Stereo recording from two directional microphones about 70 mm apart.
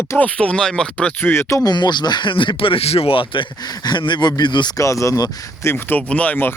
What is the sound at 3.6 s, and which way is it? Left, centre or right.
Speech, left.